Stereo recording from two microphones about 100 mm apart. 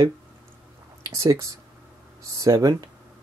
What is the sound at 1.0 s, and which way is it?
Speech, 30° right (ahead or behind).